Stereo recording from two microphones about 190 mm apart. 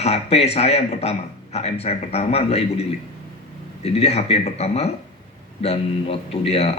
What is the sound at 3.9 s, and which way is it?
Speech, 35° left (ahead or behind).